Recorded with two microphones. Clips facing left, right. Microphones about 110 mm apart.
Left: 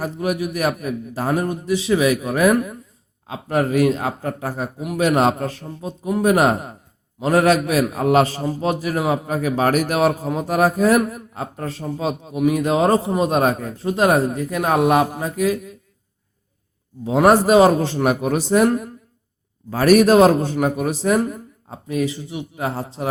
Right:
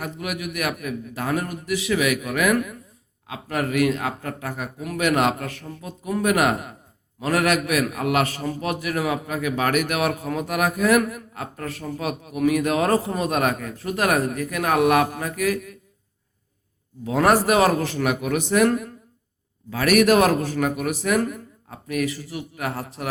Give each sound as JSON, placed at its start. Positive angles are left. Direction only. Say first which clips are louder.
{"t": 0.0, "sound": "a man's voice", "louder": "left 7 dB", "side_deg": 30}
{"t": 17.0, "sound": "a man's voice", "louder": "left 4 dB", "side_deg": 25}